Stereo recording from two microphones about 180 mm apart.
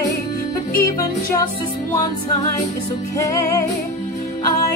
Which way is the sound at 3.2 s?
20° left (ahead or behind).